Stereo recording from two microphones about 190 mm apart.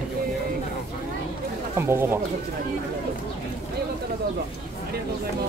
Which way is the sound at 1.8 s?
10° right (ahead or behind).